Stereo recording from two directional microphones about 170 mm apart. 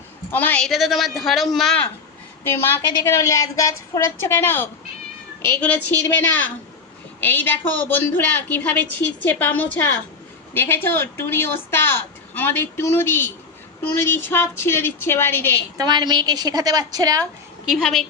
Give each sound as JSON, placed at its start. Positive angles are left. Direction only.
{"t": 0.3, "sound": "speech", "side_deg": 10}
{"t": 3.0, "sound": "a woman's voice", "side_deg": 15}
{"t": 15.8, "sound": "a woman's voice", "side_deg": -25}
{"t": 17.7, "sound": "speech", "side_deg": 0}